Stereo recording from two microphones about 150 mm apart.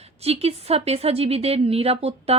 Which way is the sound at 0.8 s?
40° right (ahead or behind).